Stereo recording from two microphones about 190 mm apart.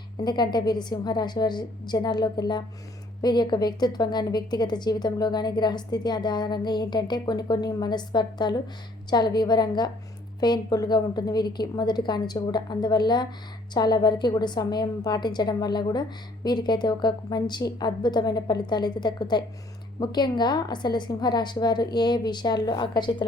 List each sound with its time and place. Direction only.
0.2 s a woman's voice: 20° left (ahead or behind)